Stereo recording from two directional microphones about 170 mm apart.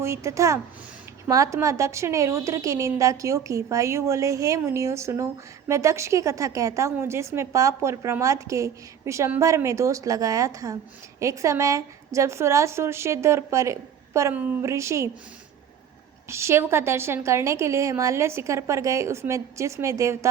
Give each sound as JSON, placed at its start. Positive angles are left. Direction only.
{"t": 0.0, "sound": "a woman's voice", "side_deg": -15}
{"t": 16.3, "sound": "a woman's voice", "side_deg": -15}